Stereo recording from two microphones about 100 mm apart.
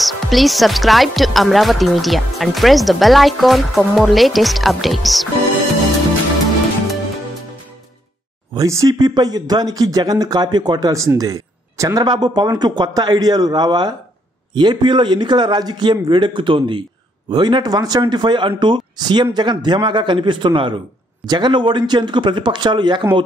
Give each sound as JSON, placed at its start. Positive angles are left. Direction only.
{"t": 0.0, "sound": "speech", "side_deg": 0}
{"t": 8.5, "sound": "a man's voice", "side_deg": -35}